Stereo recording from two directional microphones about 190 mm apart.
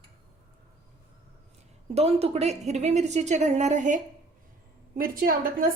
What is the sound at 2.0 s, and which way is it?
A woman's voice, 35° right (ahead or behind).